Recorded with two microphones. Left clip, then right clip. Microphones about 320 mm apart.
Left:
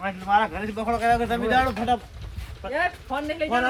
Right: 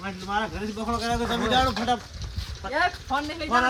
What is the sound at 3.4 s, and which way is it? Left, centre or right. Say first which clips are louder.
Speech: right 1 dB; centre.